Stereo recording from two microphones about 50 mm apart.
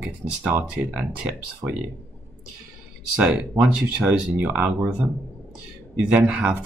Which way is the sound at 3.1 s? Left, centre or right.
Right.